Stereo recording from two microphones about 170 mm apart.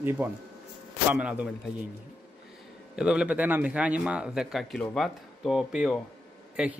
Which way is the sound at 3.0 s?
5° right (ahead or behind).